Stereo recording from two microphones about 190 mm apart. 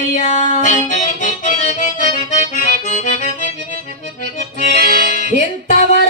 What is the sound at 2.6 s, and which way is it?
Accordion, 40° left (ahead or behind).